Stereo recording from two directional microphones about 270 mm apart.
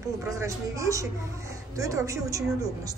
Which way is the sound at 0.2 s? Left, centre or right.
Centre.